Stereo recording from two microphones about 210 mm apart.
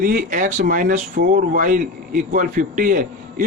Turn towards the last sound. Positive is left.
turn(degrees=-40)  # may be behind; listen again after turning